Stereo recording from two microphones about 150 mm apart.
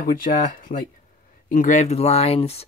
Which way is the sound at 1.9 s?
45° left (ahead or behind).